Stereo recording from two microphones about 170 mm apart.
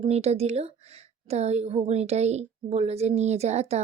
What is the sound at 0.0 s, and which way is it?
Speech, 40° right (ahead or behind).